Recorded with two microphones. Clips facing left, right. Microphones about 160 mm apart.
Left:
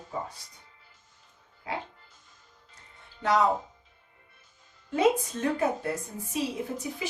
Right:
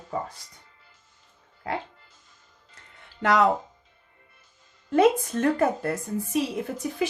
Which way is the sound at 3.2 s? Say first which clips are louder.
Right 3 dB; 75° right (ahead or behind).